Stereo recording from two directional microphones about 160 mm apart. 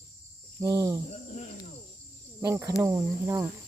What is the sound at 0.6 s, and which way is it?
Speech, 25° right (ahead or behind).